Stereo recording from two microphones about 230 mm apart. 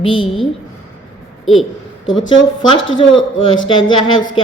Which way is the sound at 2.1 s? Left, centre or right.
Centre.